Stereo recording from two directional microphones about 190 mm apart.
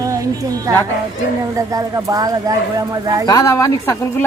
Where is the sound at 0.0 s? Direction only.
15° right (ahead or behind).